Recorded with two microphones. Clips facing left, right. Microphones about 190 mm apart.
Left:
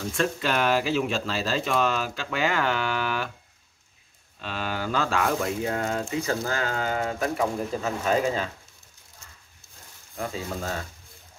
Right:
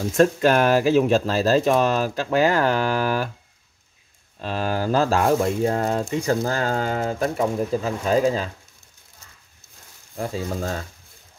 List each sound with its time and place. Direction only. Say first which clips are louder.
0.1 s speech: right 10 dB; 45° right (ahead or behind)
4.4 s speech: right 6 dB; 40° right (ahead or behind)
10.1 s speech: right 4 dB; 35° right (ahead or behind)